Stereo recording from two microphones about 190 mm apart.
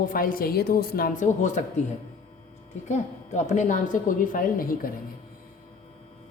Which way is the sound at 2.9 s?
40° left (ahead or behind).